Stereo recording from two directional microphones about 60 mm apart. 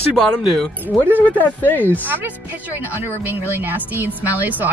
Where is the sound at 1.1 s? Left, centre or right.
Left.